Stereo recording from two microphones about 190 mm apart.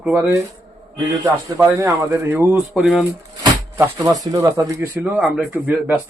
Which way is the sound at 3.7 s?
10° right (ahead or behind).